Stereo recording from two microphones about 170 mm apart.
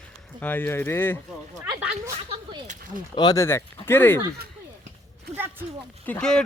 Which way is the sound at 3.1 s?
20° left (ahead or behind).